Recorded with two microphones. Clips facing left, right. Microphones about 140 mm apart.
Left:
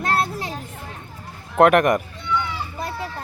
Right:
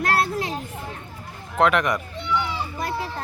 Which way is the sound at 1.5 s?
55° left (ahead or behind).